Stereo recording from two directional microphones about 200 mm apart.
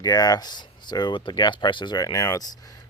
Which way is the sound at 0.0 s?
20° left (ahead or behind).